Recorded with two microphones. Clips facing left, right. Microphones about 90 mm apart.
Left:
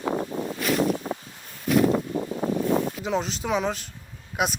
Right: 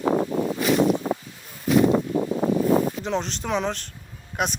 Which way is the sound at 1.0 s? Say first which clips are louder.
Right 5 dB; 60° right (ahead or behind).